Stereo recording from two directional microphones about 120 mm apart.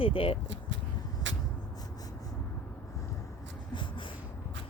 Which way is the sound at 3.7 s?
40° left (ahead or behind).